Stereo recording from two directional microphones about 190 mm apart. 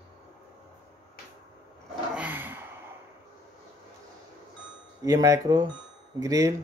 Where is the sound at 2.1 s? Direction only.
10° right (ahead or behind).